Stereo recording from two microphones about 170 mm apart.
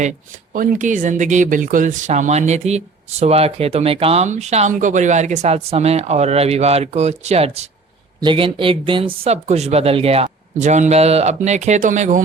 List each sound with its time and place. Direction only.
0.5 s speech: 50° right (ahead or behind)